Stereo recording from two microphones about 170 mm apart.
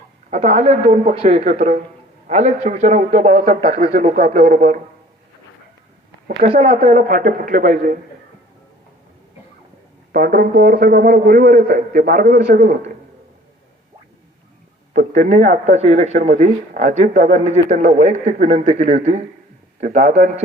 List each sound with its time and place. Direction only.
0.3 s speech: 40° right (ahead or behind)
6.4 s speech: 50° right (ahead or behind)
10.1 s a man's voice: 55° right (ahead or behind)
14.9 s speech: 45° right (ahead or behind)